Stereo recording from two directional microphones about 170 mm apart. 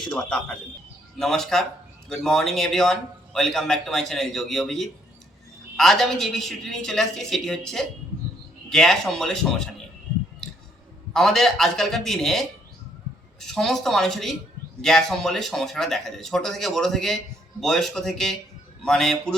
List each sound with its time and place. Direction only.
0.0 s a man's voice: 5° left (ahead or behind)
11.1 s a man's voice: centre (ahead or behind)